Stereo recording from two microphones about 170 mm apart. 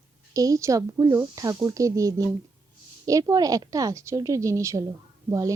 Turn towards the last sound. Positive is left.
turn(degrees=-20)  # may be behind; listen again after turning